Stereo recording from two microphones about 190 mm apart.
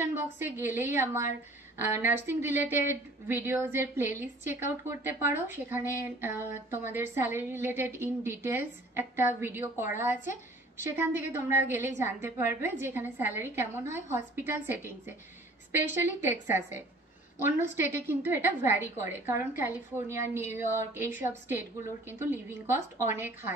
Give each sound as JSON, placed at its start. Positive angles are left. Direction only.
{"t": 0.0, "sound": "a woman's voice", "side_deg": -10}
{"t": 10.9, "sound": "a woman's voice", "side_deg": -10}